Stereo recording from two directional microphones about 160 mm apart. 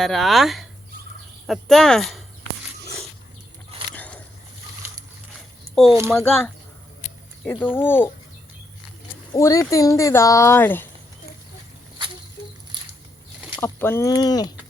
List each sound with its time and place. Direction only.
0.0 s speech: centre (ahead or behind)
3.9 s a sound: 10° left (ahead or behind)
5.7 s speech: centre (ahead or behind)
7.6 s speech: 15° left (ahead or behind)
9.3 s speech: 20° left (ahead or behind)
12.7 s a sound: 30° right (ahead or behind)
13.6 s speech: 15° left (ahead or behind)